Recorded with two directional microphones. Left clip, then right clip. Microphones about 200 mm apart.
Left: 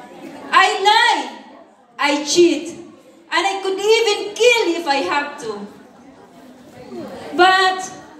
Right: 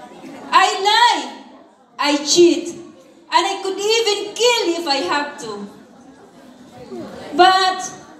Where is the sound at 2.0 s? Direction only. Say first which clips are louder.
Right 1 dB; 20° left (ahead or behind).